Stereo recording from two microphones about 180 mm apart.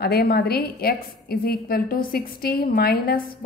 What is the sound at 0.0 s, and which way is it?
A woman's voice, 60° left (ahead or behind).